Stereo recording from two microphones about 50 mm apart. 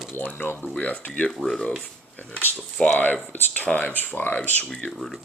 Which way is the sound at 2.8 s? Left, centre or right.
Centre.